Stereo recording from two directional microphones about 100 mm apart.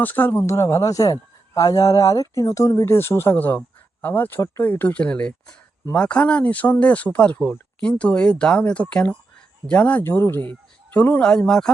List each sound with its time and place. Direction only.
0.0 s speech: 20° left (ahead or behind)
10.5 s a sound: 20° left (ahead or behind)
11.2 s speech: 10° left (ahead or behind)